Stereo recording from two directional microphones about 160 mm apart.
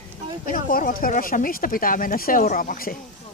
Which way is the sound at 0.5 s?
60° left (ahead or behind).